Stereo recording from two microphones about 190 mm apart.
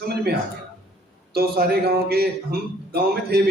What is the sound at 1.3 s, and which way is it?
Speech, 55° right (ahead or behind).